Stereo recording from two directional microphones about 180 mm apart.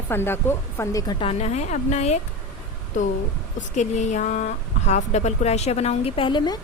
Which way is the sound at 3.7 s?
40° left (ahead or behind).